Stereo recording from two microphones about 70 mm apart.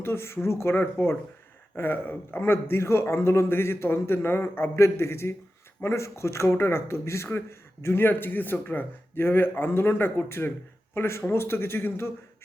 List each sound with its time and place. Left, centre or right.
0.0 s speech: left